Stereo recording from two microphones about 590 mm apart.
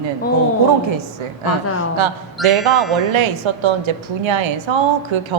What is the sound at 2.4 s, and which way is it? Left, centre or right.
Speech, centre.